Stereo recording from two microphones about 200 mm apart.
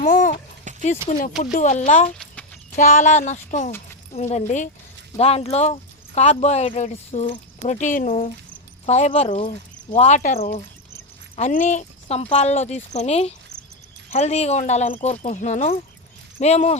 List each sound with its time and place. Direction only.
0.0 s a sound: 40° left (ahead or behind)
0.7 s clip-clop: 40° right (ahead or behind)
1.5 s speech: 40° left (ahead or behind)